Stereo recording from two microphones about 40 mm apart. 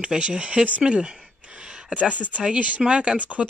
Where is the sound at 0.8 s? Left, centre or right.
Right.